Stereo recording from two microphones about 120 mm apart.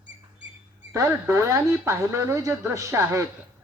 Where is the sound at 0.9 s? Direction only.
25° right (ahead or behind).